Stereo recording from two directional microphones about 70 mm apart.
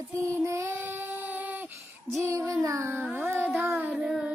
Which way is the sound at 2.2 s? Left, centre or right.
Right.